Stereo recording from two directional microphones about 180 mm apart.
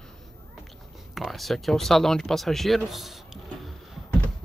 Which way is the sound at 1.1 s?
Centre (ahead or behind).